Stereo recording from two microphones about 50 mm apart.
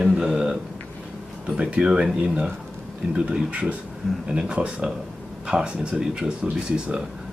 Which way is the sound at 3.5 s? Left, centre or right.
Right.